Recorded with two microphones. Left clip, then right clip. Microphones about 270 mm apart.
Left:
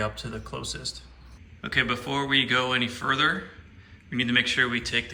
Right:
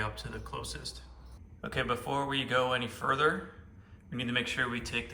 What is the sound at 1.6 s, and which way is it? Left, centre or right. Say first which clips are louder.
Speech: left 7 dB; centre.